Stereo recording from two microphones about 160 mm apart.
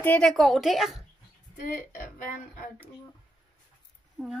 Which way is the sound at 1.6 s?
55° left (ahead or behind).